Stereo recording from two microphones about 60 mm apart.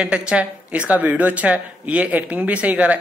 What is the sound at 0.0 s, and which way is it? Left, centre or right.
Speech, centre.